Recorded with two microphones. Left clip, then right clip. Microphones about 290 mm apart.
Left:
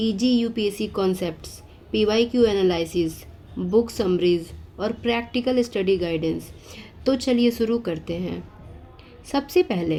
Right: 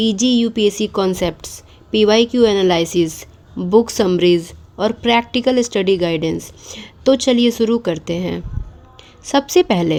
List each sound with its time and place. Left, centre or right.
0.0 s a woman's voice: right